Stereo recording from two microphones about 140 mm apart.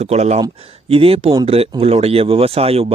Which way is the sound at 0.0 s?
50° right (ahead or behind).